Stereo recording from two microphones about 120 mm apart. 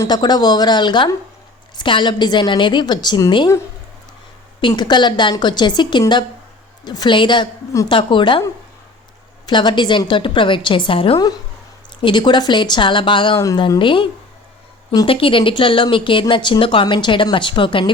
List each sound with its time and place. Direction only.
0.1 s a woman's voice: 35° left (ahead or behind)
4.6 s a woman's voice: 40° left (ahead or behind)
9.5 s a woman's voice: 40° left (ahead or behind)
13.3 s speech: 30° left (ahead or behind)
13.6 s speech: 40° left (ahead or behind)